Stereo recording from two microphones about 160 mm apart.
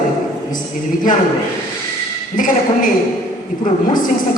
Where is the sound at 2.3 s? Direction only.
55° left (ahead or behind).